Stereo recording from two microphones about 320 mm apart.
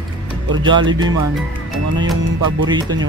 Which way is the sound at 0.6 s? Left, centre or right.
Centre.